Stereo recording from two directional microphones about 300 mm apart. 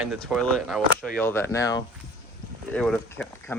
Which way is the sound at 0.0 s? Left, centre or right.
Centre.